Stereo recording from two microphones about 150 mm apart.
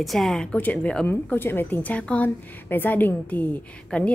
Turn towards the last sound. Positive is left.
turn(degrees=10)  # may be behind; listen again after turning